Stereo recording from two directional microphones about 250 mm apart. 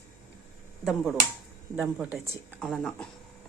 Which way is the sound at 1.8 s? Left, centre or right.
Centre.